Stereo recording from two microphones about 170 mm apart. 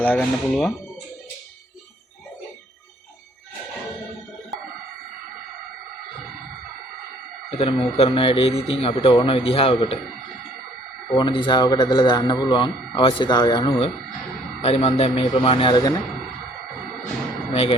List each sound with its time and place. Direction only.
0.0 s speech: 10° left (ahead or behind)
7.5 s speech: 35° left (ahead or behind)
11.1 s speech: 30° left (ahead or behind)
17.5 s speech: 35° left (ahead or behind)